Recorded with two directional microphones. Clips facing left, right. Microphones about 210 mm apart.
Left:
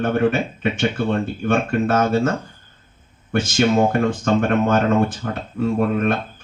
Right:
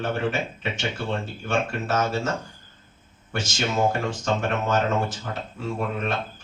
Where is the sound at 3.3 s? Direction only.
55° left (ahead or behind).